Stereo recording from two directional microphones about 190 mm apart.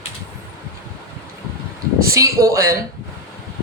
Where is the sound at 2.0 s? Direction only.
15° right (ahead or behind).